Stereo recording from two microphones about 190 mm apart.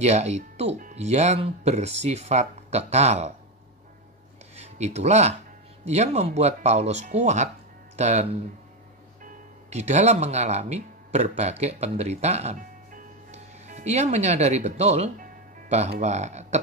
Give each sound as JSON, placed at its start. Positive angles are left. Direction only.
{"t": 0.0, "sound": "speech", "side_deg": -35}
{"t": 4.6, "sound": "speech", "side_deg": -35}